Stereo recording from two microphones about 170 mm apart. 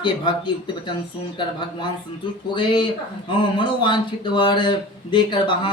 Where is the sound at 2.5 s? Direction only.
30° left (ahead or behind).